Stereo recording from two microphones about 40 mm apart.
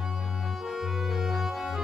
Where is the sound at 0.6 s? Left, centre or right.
Centre.